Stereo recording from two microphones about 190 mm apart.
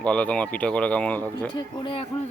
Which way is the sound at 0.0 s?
5° left (ahead or behind).